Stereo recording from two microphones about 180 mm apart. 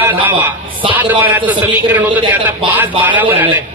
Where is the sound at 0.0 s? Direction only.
10° right (ahead or behind).